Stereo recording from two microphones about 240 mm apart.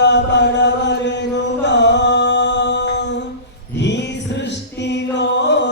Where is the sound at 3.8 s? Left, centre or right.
Left.